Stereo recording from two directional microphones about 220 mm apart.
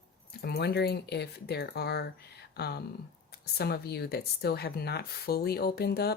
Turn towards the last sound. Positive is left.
turn(degrees=45)  # may be behind; listen again after turning